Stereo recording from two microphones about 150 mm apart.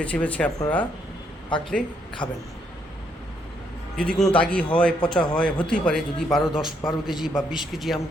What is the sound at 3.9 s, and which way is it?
A man's voice, 5° left (ahead or behind).